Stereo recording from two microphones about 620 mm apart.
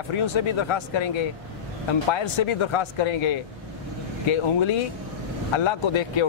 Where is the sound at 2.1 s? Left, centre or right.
Left.